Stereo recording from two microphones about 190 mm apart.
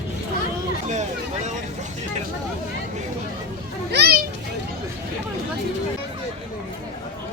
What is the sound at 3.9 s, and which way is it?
Children playing, 55° right (ahead or behind).